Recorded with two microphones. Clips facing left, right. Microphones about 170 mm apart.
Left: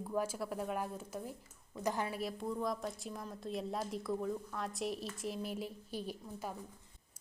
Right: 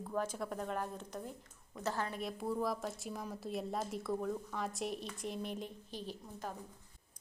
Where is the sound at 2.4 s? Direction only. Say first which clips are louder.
Right 3 dB; 5° right (ahead or behind).